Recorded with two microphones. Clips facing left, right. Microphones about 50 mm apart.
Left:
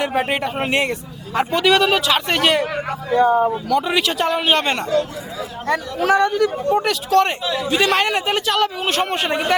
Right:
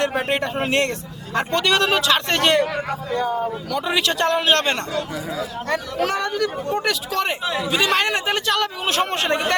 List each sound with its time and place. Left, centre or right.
0.0 s speech: centre
3.2 s speech: left
3.7 s speech: centre